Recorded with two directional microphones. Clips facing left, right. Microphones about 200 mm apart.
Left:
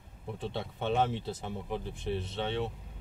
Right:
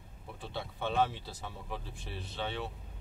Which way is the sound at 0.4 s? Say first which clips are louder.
Left 3 dB; 20° left (ahead or behind).